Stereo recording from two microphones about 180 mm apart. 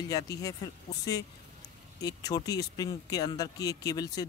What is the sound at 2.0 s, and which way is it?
Speech, 20° left (ahead or behind).